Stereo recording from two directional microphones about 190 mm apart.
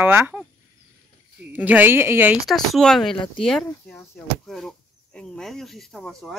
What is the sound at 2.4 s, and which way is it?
Speech, centre (ahead or behind).